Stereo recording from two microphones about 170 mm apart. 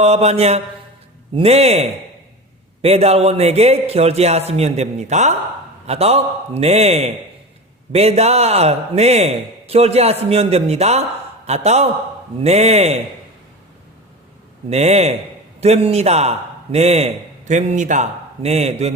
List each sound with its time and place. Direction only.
0.0 s a man's voice: 40° right (ahead or behind)
14.7 s a man's voice: 40° right (ahead or behind)